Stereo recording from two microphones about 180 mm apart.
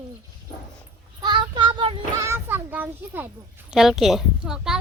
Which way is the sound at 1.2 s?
25° right (ahead or behind).